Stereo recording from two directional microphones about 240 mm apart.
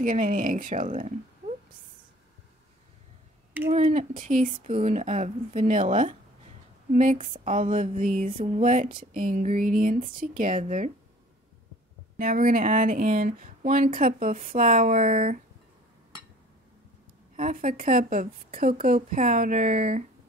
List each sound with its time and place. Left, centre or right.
0.0 s speech: right
3.6 s speech: right
8.3 s a sound: right
9.1 s speech: right
12.2 s speech: right
17.4 s speech: right